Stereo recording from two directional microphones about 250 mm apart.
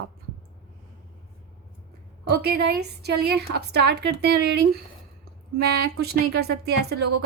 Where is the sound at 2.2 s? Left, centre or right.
Right.